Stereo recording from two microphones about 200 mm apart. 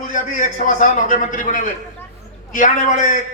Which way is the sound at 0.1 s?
40° left (ahead or behind).